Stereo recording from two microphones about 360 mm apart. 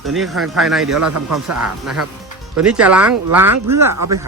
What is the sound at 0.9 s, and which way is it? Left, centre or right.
Speech, right.